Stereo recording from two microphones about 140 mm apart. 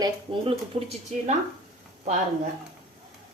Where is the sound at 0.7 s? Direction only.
45° right (ahead or behind).